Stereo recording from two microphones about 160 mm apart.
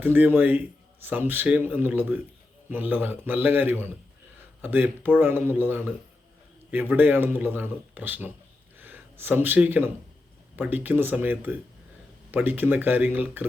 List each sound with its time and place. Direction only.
0.0 s speech: 10° right (ahead or behind)